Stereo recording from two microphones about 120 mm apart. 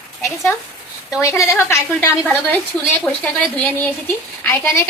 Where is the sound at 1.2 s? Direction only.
25° left (ahead or behind).